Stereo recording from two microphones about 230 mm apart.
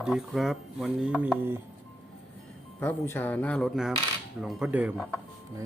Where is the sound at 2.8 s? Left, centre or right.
Centre.